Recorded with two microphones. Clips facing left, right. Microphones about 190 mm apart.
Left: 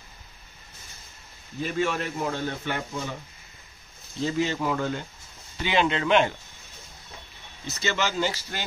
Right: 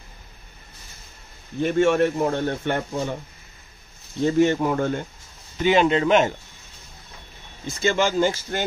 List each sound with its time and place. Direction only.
1.6 s speech: 55° right (ahead or behind)
4.2 s speech: 50° right (ahead or behind)
7.6 s speech: 50° right (ahead or behind)